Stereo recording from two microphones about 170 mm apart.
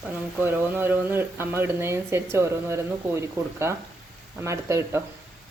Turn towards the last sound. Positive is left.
turn(degrees=-15)  # may be behind; listen again after turning